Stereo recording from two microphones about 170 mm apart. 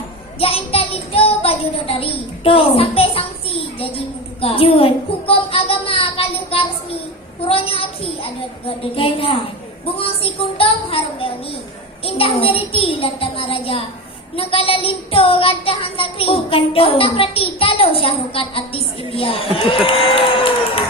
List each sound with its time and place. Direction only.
0.3 s a child's voice: 35° left (ahead or behind)
7.4 s child singing: 35° left (ahead or behind)